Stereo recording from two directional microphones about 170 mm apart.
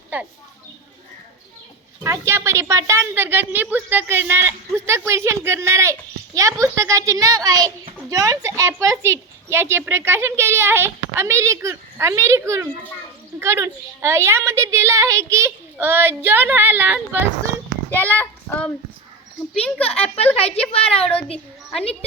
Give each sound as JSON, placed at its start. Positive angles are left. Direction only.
{"t": 0.1, "sound": "a woman's voice", "side_deg": -10}
{"t": 2.0, "sound": "a woman's voice", "side_deg": -15}
{"t": 18.1, "sound": "a child's voice", "side_deg": 10}
{"t": 19.8, "sound": "a woman's voice", "side_deg": 35}
{"t": 21.3, "sound": "a sound", "side_deg": 5}